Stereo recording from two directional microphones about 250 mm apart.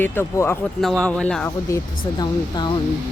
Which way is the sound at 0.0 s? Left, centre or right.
Centre.